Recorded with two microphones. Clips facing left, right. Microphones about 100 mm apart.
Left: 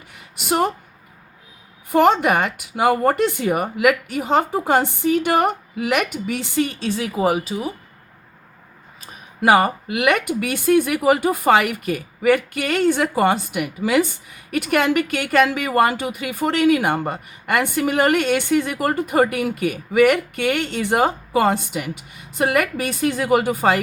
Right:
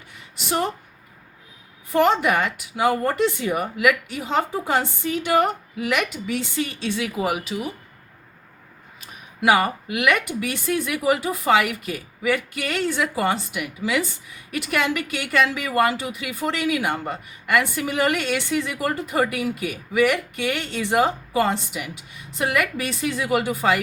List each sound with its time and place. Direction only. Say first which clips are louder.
0.3 s speech: left 4 dB; 55° left (ahead or behind)
2.0 s speech: left 3 dB; 50° left (ahead or behind); by 7.7 s 35° left (ahead or behind)
9.0 s speech: left 3 dB; 45° left (ahead or behind)